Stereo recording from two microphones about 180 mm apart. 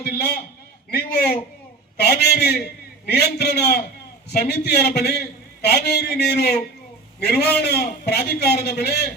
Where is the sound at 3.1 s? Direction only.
60° left (ahead or behind).